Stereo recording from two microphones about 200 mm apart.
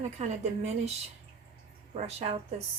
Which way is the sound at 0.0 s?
35° right (ahead or behind).